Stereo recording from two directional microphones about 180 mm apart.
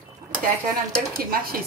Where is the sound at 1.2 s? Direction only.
55° right (ahead or behind).